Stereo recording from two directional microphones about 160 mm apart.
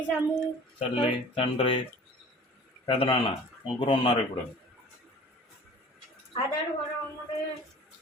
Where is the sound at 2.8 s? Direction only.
35° left (ahead or behind).